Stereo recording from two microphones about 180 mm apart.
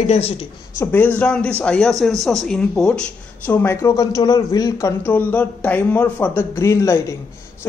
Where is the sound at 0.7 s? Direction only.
10° left (ahead or behind).